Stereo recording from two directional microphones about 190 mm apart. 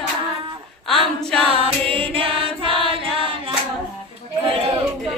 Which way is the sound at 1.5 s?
30° right (ahead or behind).